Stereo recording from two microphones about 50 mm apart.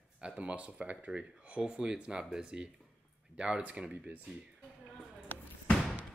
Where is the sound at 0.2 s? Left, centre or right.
Right.